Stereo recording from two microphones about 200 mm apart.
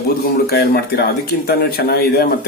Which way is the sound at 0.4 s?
50° left (ahead or behind).